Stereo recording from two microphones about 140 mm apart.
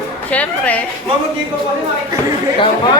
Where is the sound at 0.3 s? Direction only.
10° left (ahead or behind).